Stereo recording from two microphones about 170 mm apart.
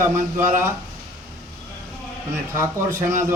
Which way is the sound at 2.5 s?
15° right (ahead or behind).